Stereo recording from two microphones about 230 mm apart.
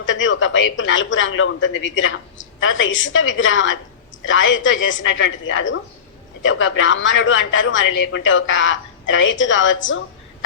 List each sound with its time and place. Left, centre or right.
0.0 s a man's voice: left